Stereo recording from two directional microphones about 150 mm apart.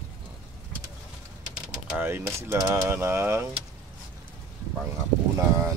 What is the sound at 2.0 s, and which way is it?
Speech, 15° right (ahead or behind).